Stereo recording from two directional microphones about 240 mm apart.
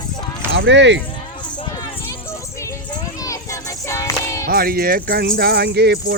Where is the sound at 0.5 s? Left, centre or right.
Right.